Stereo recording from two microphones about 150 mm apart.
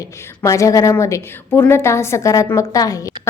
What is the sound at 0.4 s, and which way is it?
A woman's voice, 20° left (ahead or behind).